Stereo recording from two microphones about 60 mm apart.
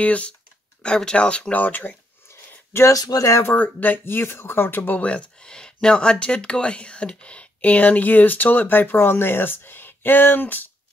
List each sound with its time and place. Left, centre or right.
0.0 s speech: left
2.2 s a sound: left
2.9 s speech: left
3.3 s speech: left
3.5 s speech: left
5.0 s speech: left